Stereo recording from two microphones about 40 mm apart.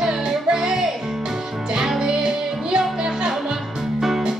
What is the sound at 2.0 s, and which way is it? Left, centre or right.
Music, centre.